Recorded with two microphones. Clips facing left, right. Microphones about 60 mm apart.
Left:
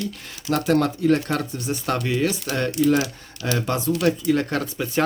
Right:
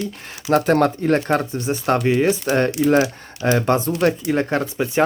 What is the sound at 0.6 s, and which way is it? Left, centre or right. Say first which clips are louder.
Speech: right 3 dB; right.